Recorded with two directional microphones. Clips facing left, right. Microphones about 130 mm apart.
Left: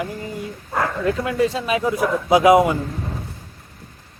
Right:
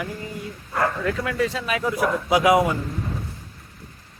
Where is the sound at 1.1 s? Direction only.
25° left (ahead or behind).